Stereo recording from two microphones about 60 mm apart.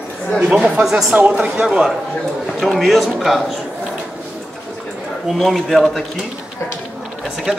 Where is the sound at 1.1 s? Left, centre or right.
Right.